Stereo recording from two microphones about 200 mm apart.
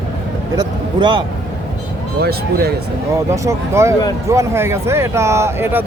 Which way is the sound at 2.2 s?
55° right (ahead or behind).